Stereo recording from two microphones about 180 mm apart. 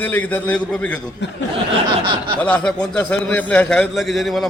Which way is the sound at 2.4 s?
5° left (ahead or behind).